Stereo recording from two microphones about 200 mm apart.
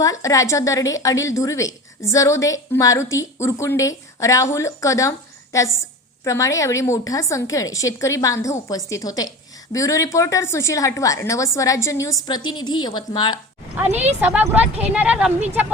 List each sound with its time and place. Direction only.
0.0 s a woman's voice: 15° left (ahead or behind)
14.2 s speech: 10° right (ahead or behind)